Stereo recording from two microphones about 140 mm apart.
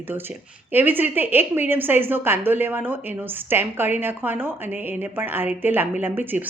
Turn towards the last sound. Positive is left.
turn(degrees=-15)  # may be behind; listen again after turning